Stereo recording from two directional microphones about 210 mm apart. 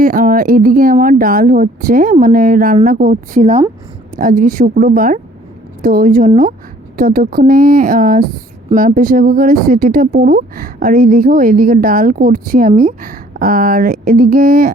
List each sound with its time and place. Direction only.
0.0 s speech: 40° right (ahead or behind)